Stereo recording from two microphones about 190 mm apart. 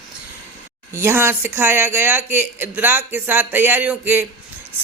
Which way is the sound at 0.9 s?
10° right (ahead or behind).